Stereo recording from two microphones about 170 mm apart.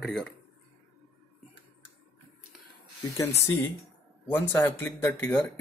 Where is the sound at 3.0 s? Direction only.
15° left (ahead or behind).